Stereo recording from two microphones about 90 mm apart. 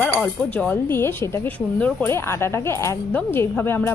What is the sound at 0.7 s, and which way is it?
Speech, 25° left (ahead or behind).